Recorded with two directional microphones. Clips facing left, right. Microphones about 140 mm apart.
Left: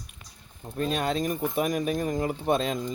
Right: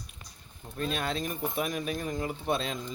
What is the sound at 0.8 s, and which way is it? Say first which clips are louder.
Speech: left 5 dB; 40° left (ahead or behind).